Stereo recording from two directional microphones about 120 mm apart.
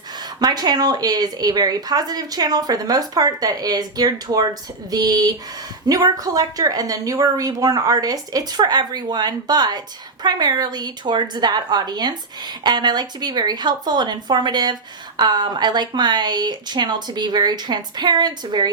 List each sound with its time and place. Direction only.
0.3 s a woman's voice: 35° right (ahead or behind)